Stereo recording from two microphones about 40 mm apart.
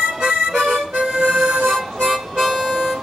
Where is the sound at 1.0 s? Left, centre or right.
Centre.